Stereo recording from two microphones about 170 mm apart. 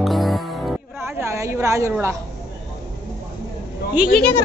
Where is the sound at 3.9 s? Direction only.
5° right (ahead or behind).